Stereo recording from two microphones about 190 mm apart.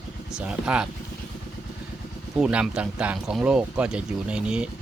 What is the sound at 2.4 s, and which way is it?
Speech, 5° right (ahead or behind).